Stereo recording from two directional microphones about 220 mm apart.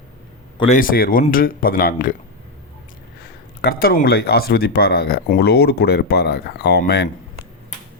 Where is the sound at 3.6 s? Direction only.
45° left (ahead or behind).